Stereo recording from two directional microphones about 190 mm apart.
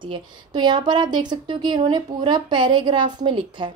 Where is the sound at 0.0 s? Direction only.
25° right (ahead or behind).